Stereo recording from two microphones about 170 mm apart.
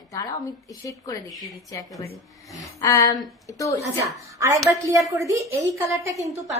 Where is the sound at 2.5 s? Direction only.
20° left (ahead or behind).